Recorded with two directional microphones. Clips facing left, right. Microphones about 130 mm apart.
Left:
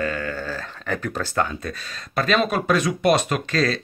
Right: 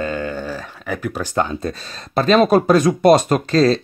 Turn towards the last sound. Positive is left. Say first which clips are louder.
# right 8 dB
turn(degrees=-30)  # may be behind; listen again after turning